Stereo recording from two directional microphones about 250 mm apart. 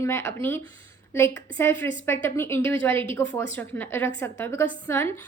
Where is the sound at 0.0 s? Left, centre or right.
Centre.